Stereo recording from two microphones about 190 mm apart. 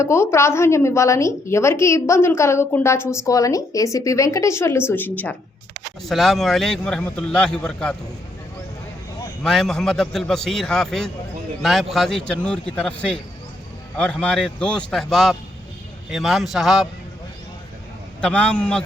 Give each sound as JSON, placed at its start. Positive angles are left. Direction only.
{"t": 0.0, "sound": "a woman's voice", "side_deg": 15}
{"t": 9.4, "sound": "a man's voice", "side_deg": 0}
{"t": 18.2, "sound": "a man's voice", "side_deg": 5}